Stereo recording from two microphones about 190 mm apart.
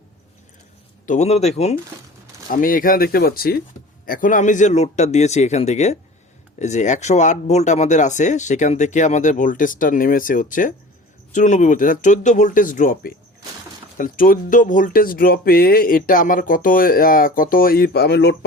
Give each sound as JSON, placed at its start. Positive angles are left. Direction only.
{"t": 1.0, "sound": "speech", "side_deg": 40}
{"t": 2.5, "sound": "speech", "side_deg": 45}